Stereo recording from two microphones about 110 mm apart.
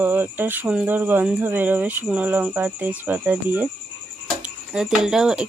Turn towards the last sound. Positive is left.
turn(degrees=-5)  # may be behind; listen again after turning